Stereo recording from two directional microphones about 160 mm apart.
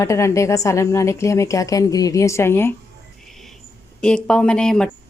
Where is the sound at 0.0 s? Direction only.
20° left (ahead or behind).